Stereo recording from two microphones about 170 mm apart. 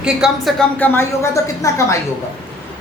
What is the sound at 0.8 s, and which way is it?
Speech, 15° left (ahead or behind).